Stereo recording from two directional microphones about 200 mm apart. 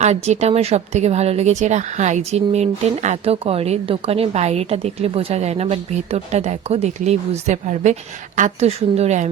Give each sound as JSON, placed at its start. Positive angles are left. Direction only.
{"t": 0.0, "sound": "speech", "side_deg": -35}